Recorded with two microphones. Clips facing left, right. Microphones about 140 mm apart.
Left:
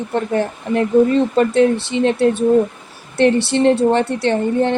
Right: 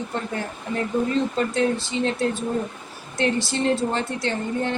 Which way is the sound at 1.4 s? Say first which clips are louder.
Left 8 dB; 65° left (ahead or behind).